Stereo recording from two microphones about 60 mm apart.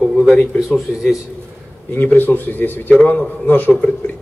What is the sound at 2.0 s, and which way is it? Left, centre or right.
A man's voice, left.